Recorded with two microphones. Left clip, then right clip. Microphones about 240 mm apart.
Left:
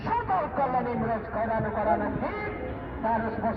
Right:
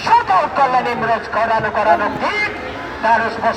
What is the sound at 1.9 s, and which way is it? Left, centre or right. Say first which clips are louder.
Speech: right 13 dB; right.